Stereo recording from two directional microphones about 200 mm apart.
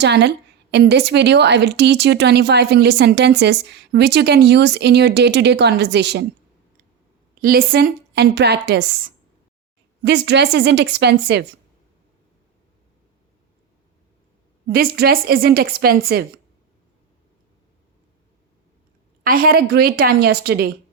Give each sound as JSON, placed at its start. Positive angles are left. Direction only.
{"t": 0.0, "sound": "a woman's voice", "side_deg": -60}
{"t": 7.4, "sound": "a woman's voice", "side_deg": -45}
{"t": 14.7, "sound": "a woman's voice", "side_deg": -50}
{"t": 19.2, "sound": "a woman's voice", "side_deg": -45}